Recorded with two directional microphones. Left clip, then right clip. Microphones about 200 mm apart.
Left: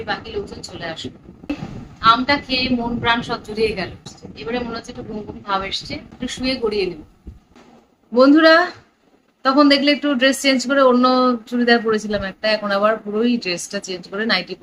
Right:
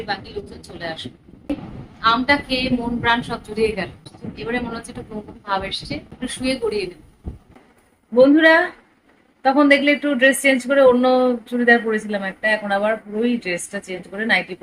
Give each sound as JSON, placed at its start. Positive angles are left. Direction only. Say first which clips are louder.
{"t": 0.8, "sound": "speech", "louder": "right 1 dB", "side_deg": 0}
{"t": 8.1, "sound": "a woman's voice", "louder": "left 1 dB", "side_deg": 5}